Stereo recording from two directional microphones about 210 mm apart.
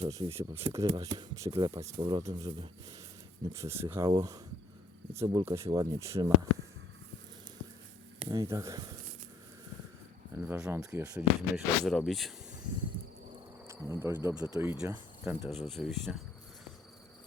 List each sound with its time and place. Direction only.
0.0 s speech: 25° right (ahead or behind)
8.3 s speech: 15° right (ahead or behind)
10.3 s speech: 10° right (ahead or behind)
13.7 s cricket: 10° right (ahead or behind)
14.4 s speech: 5° right (ahead or behind)
14.8 s cricket: 10° right (ahead or behind)
15.5 s speech: centre (ahead or behind)